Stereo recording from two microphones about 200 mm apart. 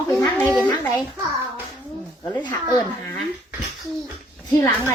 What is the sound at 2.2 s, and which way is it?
Speech, 15° left (ahead or behind).